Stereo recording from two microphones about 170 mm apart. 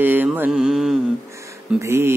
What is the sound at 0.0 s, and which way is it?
Mantra, 10° right (ahead or behind).